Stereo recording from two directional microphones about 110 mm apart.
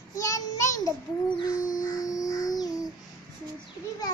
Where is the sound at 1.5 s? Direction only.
35° left (ahead or behind).